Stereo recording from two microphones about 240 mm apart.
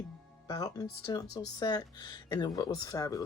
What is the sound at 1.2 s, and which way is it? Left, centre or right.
Speech, left.